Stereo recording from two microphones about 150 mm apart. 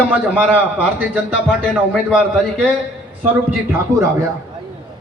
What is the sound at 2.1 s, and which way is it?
Speech, 5° right (ahead or behind).